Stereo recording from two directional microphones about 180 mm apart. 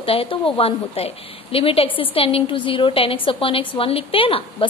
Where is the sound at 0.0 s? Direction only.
30° left (ahead or behind).